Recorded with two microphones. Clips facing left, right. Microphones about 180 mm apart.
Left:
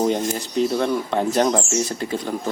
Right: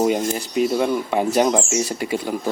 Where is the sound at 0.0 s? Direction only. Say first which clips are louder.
Right 1 dB; 10° right (ahead or behind).